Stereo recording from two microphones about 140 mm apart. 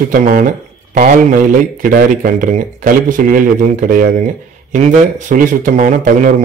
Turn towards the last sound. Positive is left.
turn(degrees=-65)  # may be behind; listen again after turning